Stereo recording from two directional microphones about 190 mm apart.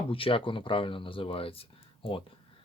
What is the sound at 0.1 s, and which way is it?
Speech, 30° left (ahead or behind).